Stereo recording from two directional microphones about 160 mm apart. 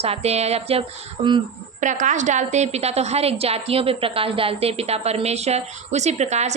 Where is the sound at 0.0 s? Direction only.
40° right (ahead or behind).